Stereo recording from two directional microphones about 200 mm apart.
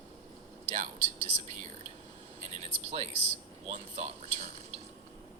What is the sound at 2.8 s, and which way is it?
Speech, 30° right (ahead or behind).